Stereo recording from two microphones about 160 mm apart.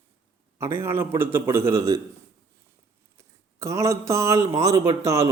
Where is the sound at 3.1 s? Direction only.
20° right (ahead or behind).